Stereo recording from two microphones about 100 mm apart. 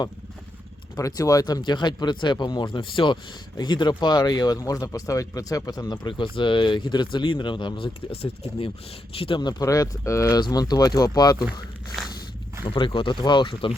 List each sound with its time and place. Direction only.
0.9 s speech: 35° left (ahead or behind); by 7.9 s 50° left (ahead or behind)
8.1 s speech: 75° left (ahead or behind)
9.1 s speech: 65° left (ahead or behind)
9.4 s speech: 40° left (ahead or behind)
12.6 s speech: 55° left (ahead or behind)